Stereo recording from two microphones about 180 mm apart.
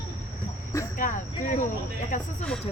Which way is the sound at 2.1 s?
45° left (ahead or behind).